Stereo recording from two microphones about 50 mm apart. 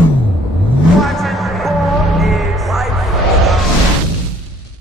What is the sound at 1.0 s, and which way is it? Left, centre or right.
Music, centre.